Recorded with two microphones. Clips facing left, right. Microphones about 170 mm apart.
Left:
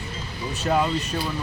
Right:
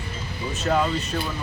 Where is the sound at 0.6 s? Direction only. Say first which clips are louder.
Even; 5° left (ahead or behind).